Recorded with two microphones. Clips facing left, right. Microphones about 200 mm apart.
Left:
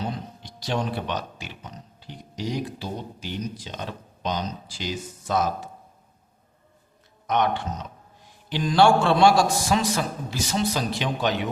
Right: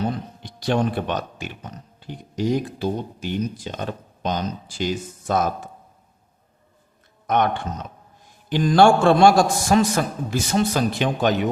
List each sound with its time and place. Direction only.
0.4 s speech: 55° right (ahead or behind)
7.3 s speech: 50° right (ahead or behind)